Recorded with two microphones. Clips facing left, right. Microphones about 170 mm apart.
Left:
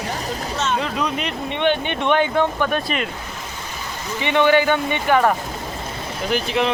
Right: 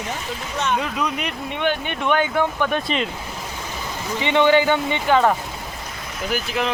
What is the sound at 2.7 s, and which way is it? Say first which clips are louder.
Speech: even; 25° right (ahead or behind).